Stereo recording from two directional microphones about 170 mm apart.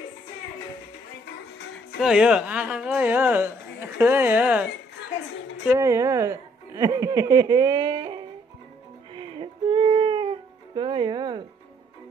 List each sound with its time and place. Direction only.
2.0 s speech: 5° right (ahead or behind)
5.7 s speech: 15° right (ahead or behind); by 8.2 s 30° right (ahead or behind)
9.1 s music: 30° right (ahead or behind)